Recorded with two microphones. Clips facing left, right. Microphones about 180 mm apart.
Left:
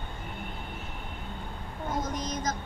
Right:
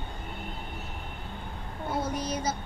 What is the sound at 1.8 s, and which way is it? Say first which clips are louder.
Speech: right 2 dB; 10° right (ahead or behind).